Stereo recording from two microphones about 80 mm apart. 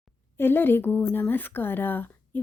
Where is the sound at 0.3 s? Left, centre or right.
Left.